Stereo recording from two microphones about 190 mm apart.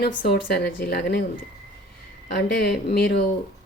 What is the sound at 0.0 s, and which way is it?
Speech, 55° left (ahead or behind).